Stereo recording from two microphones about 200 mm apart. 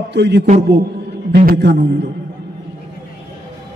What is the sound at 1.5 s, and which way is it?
Speech, 60° right (ahead or behind).